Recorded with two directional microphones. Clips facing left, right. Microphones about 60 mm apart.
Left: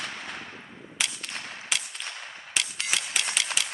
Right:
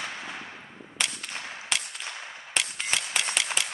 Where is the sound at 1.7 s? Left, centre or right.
Centre.